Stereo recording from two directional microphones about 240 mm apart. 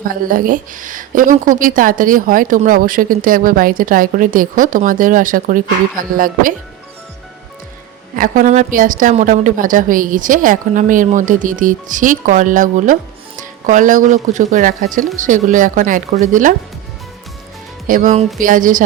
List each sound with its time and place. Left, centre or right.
0.1 s a woman's voice: right
8.1 s a woman's voice: right
17.8 s a woman's voice: right